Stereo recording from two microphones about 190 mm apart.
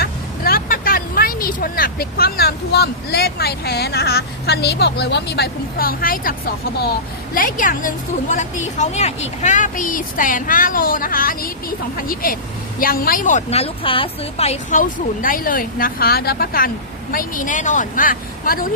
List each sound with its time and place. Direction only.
0.0 s a woman's voice: 50° left (ahead or behind)